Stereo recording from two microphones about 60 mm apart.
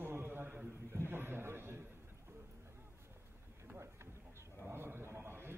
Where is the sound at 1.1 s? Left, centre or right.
Right.